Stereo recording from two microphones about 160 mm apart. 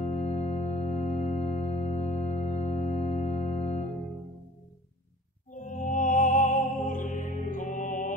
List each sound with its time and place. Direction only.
0.0 s music: 45° left (ahead or behind)
5.5 s music: 50° left (ahead or behind)